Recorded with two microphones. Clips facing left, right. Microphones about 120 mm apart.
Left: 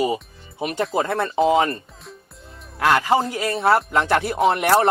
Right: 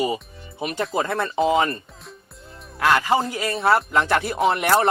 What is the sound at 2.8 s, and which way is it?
Speech, 45° left (ahead or behind).